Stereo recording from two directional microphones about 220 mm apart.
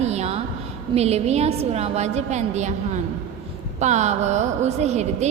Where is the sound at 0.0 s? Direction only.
30° right (ahead or behind).